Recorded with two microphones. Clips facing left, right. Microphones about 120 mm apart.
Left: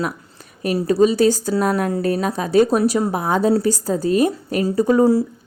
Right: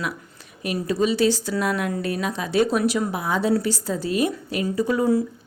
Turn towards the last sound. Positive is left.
turn(degrees=35)  # may be behind; listen again after turning